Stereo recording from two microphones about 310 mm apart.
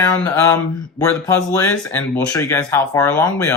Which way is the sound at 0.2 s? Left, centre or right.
Centre.